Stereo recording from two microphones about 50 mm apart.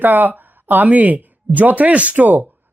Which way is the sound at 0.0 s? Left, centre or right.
Right.